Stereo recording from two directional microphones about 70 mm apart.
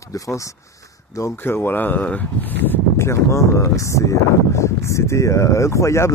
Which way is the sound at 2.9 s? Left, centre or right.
Left.